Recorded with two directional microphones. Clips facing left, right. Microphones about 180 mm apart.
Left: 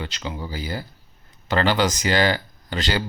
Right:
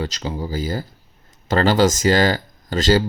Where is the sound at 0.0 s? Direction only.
40° right (ahead or behind).